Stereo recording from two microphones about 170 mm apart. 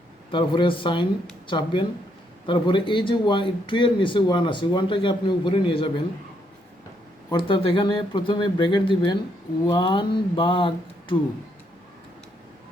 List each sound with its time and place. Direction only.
0.3 s speech: 30° left (ahead or behind)
7.3 s speech: 30° left (ahead or behind)